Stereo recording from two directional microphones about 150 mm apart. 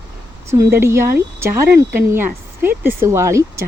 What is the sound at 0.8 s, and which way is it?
Speech, 15° right (ahead or behind).